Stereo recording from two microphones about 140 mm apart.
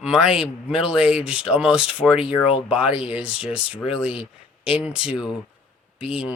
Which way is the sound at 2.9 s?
45° left (ahead or behind).